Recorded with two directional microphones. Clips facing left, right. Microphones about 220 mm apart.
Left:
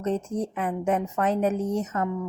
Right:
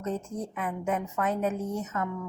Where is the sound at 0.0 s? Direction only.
90° left.